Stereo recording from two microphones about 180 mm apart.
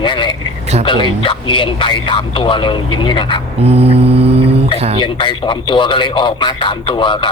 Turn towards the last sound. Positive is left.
turn(degrees=25)  # may be behind; listen again after turning